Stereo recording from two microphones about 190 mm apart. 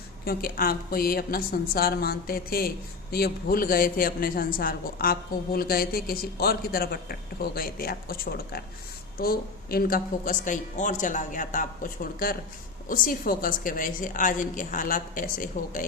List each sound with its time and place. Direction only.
0.3 s a woman's voice: 50° left (ahead or behind)